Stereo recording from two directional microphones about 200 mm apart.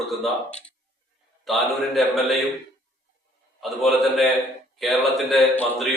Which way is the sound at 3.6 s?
Centre (ahead or behind).